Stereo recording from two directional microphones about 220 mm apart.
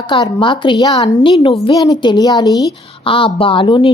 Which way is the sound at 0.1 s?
20° left (ahead or behind).